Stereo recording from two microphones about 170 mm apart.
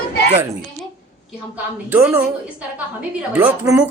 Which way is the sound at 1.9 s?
10° right (ahead or behind).